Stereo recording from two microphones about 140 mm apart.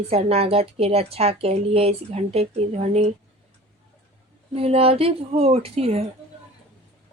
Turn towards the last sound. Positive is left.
turn(degrees=-45)  # may be behind; listen again after turning